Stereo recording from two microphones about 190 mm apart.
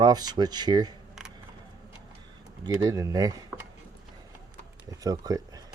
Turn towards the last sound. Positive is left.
turn(degrees=-20)  # may be behind; listen again after turning